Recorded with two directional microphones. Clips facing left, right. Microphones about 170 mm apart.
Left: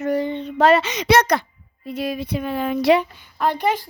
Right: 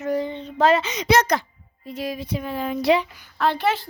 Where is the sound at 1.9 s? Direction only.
65° left (ahead or behind).